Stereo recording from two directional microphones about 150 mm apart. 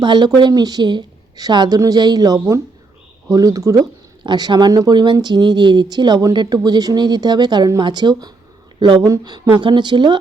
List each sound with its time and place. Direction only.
0.0 s speech: 30° right (ahead or behind)